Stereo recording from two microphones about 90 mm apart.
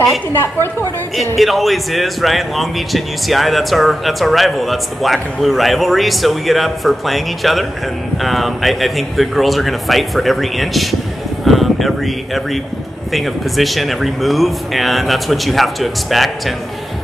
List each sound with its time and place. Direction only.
0.3 s a woman's voice: 25° left (ahead or behind)
1.3 s a man's voice: centre (ahead or behind)